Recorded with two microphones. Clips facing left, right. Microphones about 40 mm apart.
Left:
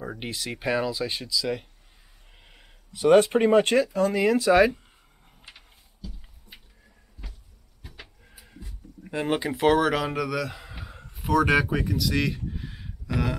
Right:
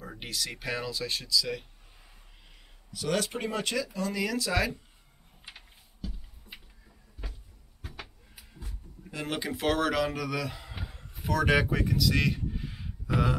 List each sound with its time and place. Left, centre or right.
0.0 s speech: left
2.9 s speech: left
4.2 s speech: left
8.0 s cupboard open or close: right
9.0 s speech: left; by 10.7 s centre
10.9 s a sound: centre
11.1 s speech: centre